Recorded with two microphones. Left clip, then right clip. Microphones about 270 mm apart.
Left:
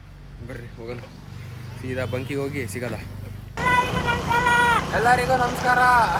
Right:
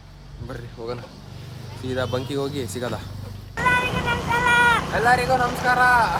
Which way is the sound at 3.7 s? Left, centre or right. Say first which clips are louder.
Left 5 dB; centre.